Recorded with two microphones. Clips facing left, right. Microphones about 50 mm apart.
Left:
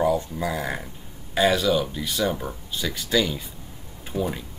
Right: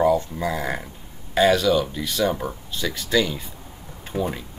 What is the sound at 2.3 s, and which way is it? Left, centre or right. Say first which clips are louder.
Speech: right 3 dB; centre.